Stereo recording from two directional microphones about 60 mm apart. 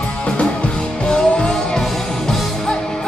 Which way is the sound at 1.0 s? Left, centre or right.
Centre.